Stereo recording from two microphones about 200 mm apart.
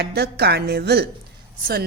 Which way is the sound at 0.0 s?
55° right (ahead or behind).